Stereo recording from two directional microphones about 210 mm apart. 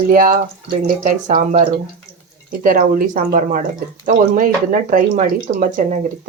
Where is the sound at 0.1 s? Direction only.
40° right (ahead or behind).